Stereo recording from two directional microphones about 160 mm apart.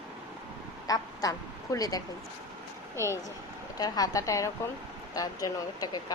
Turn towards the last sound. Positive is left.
turn(degrees=25)  # may be behind; listen again after turning